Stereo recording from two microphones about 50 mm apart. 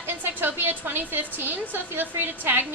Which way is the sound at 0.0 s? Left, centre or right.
Right.